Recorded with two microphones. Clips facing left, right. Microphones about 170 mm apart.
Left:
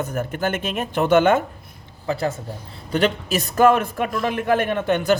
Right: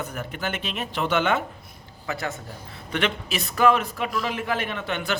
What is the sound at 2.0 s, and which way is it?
A man's voice, 30° left (ahead or behind).